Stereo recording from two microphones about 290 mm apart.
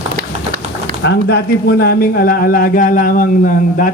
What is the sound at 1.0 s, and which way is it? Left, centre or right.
A man's voice, left.